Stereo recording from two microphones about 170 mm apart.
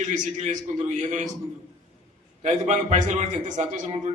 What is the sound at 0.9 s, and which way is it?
Speech, 45° right (ahead or behind).